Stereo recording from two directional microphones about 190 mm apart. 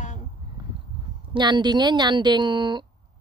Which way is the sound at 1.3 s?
25° right (ahead or behind).